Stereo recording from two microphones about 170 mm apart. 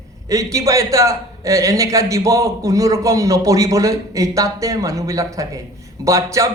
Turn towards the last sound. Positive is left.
turn(degrees=-20)  # may be behind; listen again after turning